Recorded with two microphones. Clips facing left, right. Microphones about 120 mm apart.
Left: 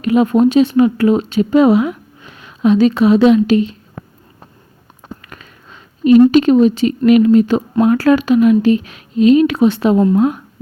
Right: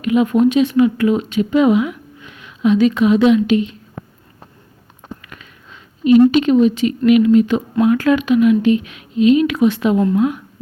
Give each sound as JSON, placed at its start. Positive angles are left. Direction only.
{"t": 0.0, "sound": "speech", "side_deg": 40}
{"t": 5.2, "sound": "speech", "side_deg": 40}